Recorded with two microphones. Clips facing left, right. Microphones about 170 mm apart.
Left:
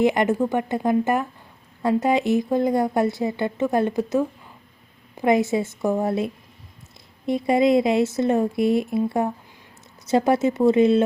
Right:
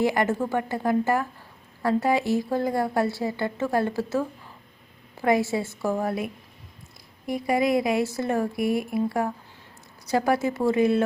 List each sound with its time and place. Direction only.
0.0 s speech: 20° left (ahead or behind)